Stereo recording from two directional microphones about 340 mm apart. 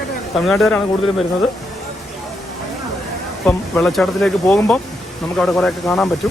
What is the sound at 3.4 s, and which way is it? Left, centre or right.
Speech, centre.